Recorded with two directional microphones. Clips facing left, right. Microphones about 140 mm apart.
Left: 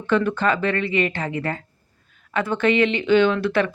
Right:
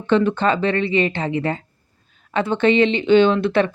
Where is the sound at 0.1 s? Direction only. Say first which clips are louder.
Right 3 dB; 25° right (ahead or behind).